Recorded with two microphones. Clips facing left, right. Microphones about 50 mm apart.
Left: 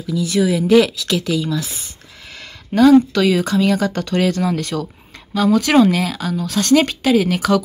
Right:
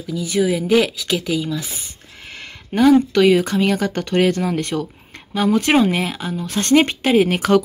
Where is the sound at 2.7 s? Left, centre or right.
Right.